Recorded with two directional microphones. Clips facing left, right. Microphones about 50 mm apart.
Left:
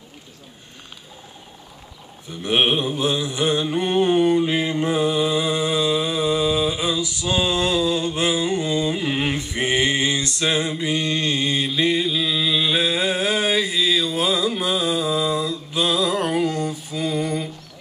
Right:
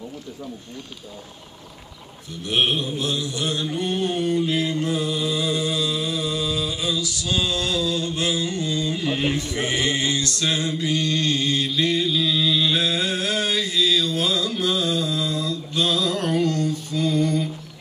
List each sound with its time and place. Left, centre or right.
2.4 s mantra: left